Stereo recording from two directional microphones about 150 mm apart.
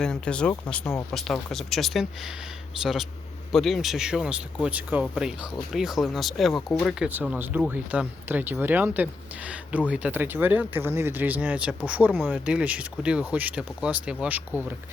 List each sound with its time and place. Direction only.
0.0 s speech: 5° left (ahead or behind)
1.1 s speech: centre (ahead or behind)
7.1 s speech: 10° right (ahead or behind)